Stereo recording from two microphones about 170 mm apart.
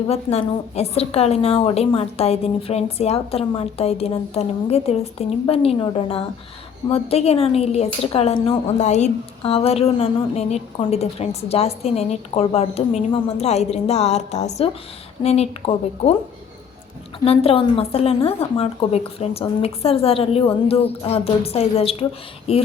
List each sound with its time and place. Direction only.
0.1 s a woman's voice: 35° left (ahead or behind)
17.2 s a woman's voice: 35° left (ahead or behind)